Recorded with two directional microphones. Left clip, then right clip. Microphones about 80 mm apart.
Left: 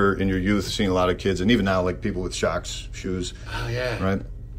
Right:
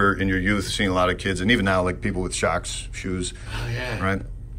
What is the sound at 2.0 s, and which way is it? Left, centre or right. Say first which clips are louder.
Speech: right 1 dB; left.